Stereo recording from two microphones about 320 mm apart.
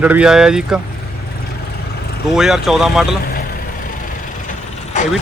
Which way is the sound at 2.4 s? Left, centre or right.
Centre.